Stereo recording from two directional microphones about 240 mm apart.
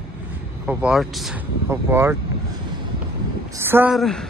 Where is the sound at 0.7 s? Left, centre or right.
Centre.